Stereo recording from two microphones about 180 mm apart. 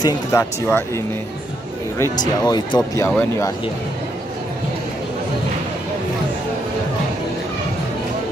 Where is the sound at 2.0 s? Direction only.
20° left (ahead or behind).